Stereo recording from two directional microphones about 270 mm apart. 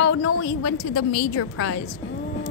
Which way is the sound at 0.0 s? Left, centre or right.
Left.